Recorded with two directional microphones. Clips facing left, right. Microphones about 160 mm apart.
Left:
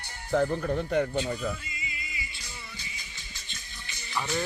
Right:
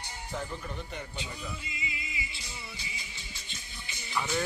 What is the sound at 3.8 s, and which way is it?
Music, 5° right (ahead or behind).